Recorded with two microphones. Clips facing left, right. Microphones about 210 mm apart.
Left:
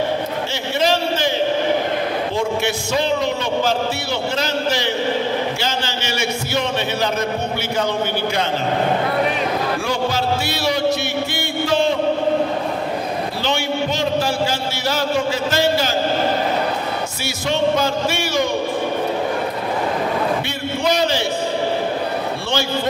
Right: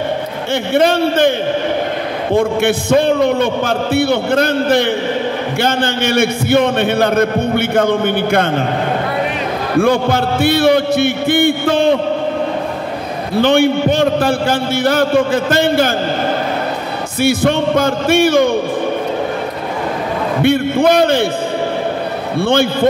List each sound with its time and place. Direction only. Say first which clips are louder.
0.7 s a man's voice: right 7 dB; 55° right (ahead or behind)
2.3 s a man's voice: right 7 dB; 55° right (ahead or behind)
9.8 s a man's voice: right 8 dB; 55° right (ahead or behind)
13.4 s a man's voice: right 13 dB; 55° right (ahead or behind)
17.2 s a man's voice: right 9 dB; 55° right (ahead or behind)
20.4 s a man's voice: right 10 dB; 55° right (ahead or behind)
22.4 s a man's voice: right 14 dB; 55° right (ahead or behind)